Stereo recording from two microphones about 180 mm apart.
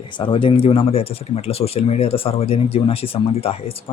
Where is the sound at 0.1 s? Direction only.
30° left (ahead or behind).